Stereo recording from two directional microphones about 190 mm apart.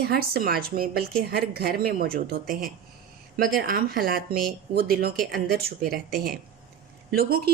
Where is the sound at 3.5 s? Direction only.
50° right (ahead or behind).